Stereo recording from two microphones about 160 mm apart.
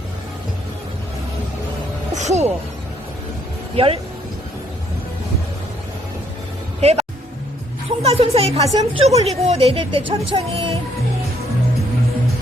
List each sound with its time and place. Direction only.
2.1 s music: 45° right (ahead or behind)
6.8 s a woman's voice: 40° right (ahead or behind)
8.0 s a woman's voice: 40° right (ahead or behind)